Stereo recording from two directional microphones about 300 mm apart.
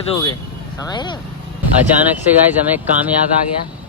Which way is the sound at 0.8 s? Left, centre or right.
Centre.